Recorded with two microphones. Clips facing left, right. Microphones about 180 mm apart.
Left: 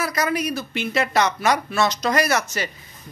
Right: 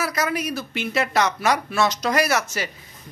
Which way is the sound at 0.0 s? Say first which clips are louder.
Left 1 dB; 5° right (ahead or behind).